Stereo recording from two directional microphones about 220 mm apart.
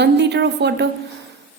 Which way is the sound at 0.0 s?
50° right (ahead or behind).